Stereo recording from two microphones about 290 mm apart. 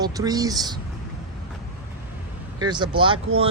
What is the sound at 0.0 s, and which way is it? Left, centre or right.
Speech, centre.